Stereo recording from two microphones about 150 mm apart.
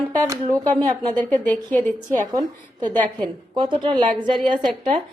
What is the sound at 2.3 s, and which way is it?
A woman's voice, 30° right (ahead or behind).